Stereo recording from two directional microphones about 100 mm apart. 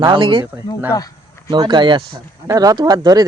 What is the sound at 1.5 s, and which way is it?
Speech, 50° right (ahead or behind).